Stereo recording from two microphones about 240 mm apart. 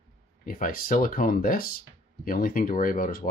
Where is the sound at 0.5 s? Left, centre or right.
Left.